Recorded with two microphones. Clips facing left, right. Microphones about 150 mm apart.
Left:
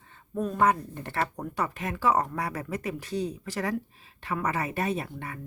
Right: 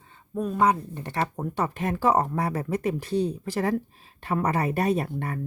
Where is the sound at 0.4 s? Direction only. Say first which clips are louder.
Right 2 dB; 15° right (ahead or behind).